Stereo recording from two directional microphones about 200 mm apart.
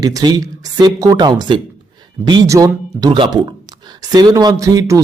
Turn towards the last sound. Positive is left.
turn(degrees=-15)  # may be behind; listen again after turning